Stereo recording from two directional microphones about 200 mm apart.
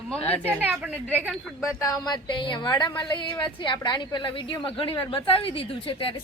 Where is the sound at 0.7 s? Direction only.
5° right (ahead or behind).